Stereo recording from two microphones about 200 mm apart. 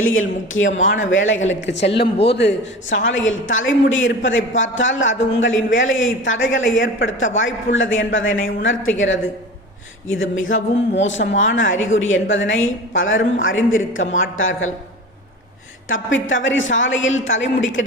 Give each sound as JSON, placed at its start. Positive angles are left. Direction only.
{"t": 0.0, "sound": "a woman's voice", "side_deg": 85}
{"t": 1.6, "sound": "a woman's voice", "side_deg": 60}
{"t": 10.1, "sound": "a woman's voice", "side_deg": 80}
{"t": 15.9, "sound": "a woman's voice", "side_deg": 75}